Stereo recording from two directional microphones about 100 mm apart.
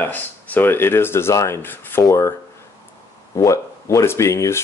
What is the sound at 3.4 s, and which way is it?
Speech, 30° left (ahead or behind).